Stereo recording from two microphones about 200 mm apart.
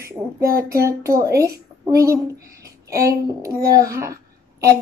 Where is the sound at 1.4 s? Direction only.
15° right (ahead or behind).